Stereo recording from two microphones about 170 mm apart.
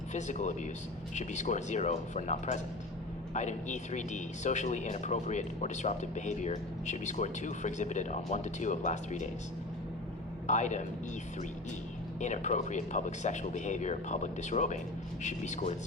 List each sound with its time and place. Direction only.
0.1 s speech: 45° left (ahead or behind)
10.4 s a man's voice: 45° left (ahead or behind)
12.2 s speech: 45° left (ahead or behind)